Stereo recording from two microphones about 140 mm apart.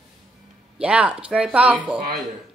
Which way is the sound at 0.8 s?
10° right (ahead or behind).